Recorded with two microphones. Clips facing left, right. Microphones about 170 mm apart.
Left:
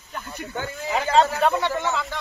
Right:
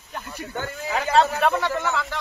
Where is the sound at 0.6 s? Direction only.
15° left (ahead or behind).